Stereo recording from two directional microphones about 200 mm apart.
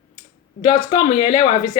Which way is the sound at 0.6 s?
30° left (ahead or behind).